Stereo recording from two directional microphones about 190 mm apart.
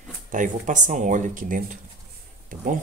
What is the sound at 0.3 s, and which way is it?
Speech, 40° right (ahead or behind).